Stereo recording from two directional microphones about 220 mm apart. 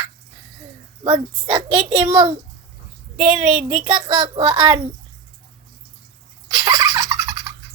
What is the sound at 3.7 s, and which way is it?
Speech, 20° right (ahead or behind).